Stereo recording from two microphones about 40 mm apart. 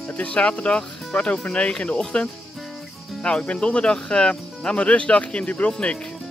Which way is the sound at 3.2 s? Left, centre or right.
Left.